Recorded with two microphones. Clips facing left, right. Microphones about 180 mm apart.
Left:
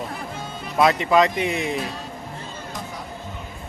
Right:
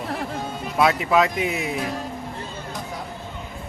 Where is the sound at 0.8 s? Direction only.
Centre (ahead or behind).